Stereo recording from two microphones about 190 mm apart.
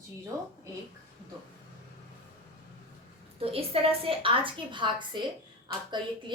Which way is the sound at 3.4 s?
30° right (ahead or behind).